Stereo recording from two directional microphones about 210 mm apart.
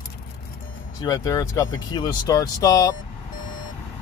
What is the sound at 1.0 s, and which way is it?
Speech, 15° left (ahead or behind).